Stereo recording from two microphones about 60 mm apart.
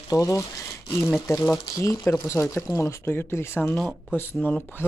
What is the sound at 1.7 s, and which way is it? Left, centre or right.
Speech, left.